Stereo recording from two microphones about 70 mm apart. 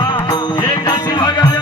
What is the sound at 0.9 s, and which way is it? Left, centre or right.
Music, left.